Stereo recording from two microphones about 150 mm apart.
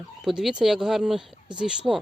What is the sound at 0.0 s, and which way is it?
Speech, 5° right (ahead or behind).